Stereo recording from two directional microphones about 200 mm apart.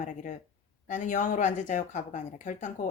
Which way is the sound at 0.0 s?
40° left (ahead or behind).